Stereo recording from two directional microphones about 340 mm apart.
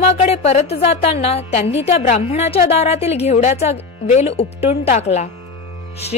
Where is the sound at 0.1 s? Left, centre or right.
Centre.